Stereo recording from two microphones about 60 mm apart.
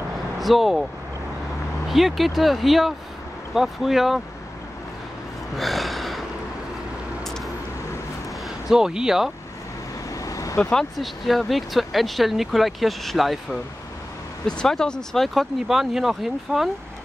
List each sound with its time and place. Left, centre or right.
0.4 s speech: centre
1.9 s speech: centre
5.6 s a sound: centre
7.2 s vehicle: centre
8.6 s speech: centre
10.1 s vehicle: left
11.0 s speech: centre
14.6 s speech: centre